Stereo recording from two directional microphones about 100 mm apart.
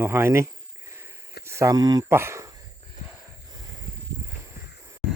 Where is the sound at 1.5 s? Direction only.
30° right (ahead or behind).